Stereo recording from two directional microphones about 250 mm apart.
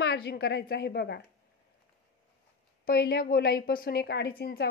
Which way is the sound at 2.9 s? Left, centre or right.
Left.